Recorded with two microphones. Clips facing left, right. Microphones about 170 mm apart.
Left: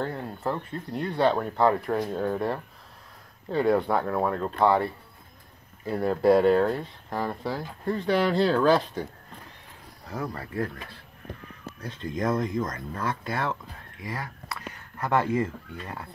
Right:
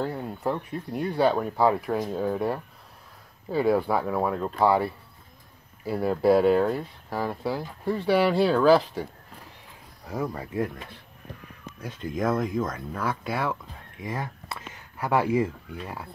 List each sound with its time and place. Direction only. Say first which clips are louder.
0.0 s speech: right 2 dB; 10° right (ahead or behind)
10.0 s speech: right 3 dB; 15° right (ahead or behind)
14.0 s a sound: right 3 dB; 25° right (ahead or behind)
15.0 s speech: right 1 dB; 10° right (ahead or behind)